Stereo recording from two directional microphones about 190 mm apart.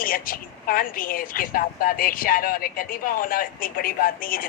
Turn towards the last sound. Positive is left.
turn(degrees=50)  # may be behind; listen again after turning